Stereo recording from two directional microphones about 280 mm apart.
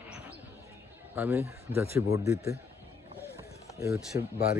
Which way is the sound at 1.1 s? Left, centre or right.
Centre.